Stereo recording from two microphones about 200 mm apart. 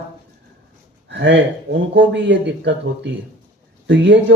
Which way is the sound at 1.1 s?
60° right (ahead or behind).